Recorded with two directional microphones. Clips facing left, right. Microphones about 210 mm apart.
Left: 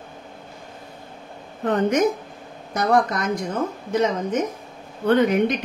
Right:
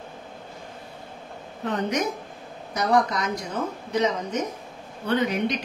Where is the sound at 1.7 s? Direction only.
50° left (ahead or behind).